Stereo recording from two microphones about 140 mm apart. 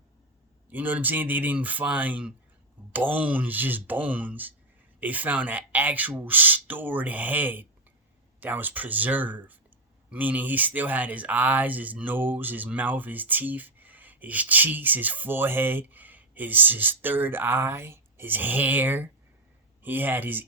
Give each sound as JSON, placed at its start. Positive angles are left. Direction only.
{"t": 0.7, "sound": "speech", "side_deg": -10}